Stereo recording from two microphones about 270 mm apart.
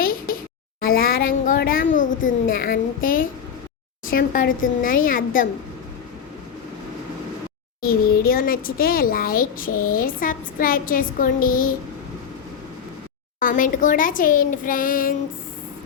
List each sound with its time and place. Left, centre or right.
0.8 s a child's voice: left
7.8 s a child's voice: left
13.4 s a child's voice: left